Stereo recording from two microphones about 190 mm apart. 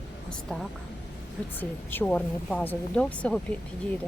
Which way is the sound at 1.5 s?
10° left (ahead or behind).